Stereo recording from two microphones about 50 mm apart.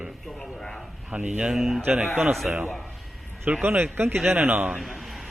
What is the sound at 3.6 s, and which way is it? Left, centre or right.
Speech, right.